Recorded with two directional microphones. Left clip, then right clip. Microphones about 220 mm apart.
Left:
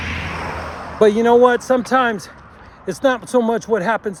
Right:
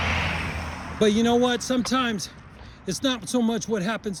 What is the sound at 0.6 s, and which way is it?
Basketball bounce, 20° left (ahead or behind).